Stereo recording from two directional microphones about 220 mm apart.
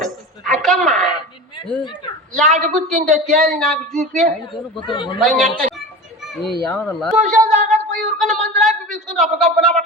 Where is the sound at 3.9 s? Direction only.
30° right (ahead or behind).